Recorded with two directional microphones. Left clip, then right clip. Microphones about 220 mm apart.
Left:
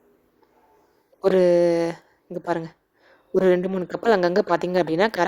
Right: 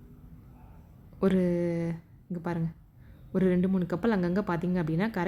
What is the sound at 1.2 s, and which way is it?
Speech, 45° left (ahead or behind).